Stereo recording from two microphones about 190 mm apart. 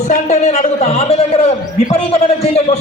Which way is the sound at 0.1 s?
35° left (ahead or behind).